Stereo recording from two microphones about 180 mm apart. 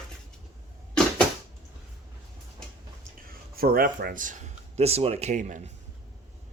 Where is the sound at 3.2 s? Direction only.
55° right (ahead or behind).